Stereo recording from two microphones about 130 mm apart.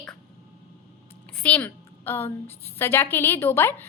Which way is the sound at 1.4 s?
10° left (ahead or behind).